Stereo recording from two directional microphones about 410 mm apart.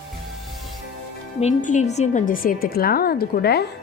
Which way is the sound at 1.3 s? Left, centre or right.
Centre.